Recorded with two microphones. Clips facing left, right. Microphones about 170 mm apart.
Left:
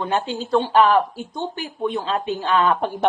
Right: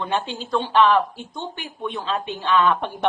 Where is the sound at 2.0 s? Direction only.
40° left (ahead or behind).